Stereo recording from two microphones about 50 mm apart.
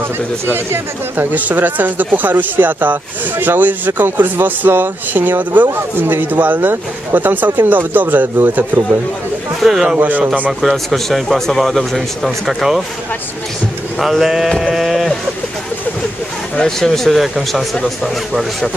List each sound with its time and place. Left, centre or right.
1.3 s speech: right
9.6 s a man's voice: centre
9.9 s speech: right
10.9 s speech: centre
13.9 s speech: centre
14.6 s a sound: centre
16.6 s speech: centre